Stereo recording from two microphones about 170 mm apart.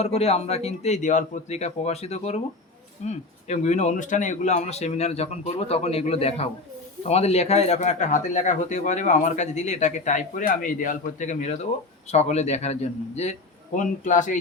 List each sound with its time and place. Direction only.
0.0 s speech: 40° left (ahead or behind)